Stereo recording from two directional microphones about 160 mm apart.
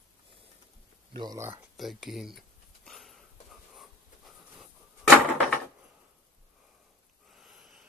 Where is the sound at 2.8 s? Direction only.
Centre (ahead or behind).